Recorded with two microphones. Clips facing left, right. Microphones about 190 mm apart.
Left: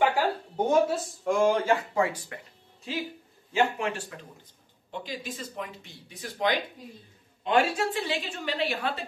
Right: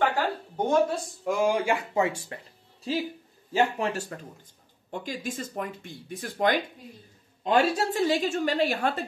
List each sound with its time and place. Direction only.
0.0 s a sound: 10° left (ahead or behind)
1.2 s speech: 5° right (ahead or behind); by 2.3 s 25° right (ahead or behind)
3.5 s speech: 40° right (ahead or behind)